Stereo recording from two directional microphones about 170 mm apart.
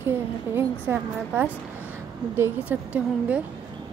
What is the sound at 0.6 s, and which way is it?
A woman's voice, 10° right (ahead or behind).